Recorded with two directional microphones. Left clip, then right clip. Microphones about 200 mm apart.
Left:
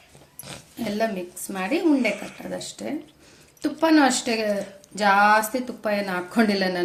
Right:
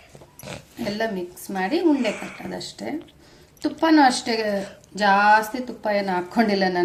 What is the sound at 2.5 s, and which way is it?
Speech, 15° left (ahead or behind).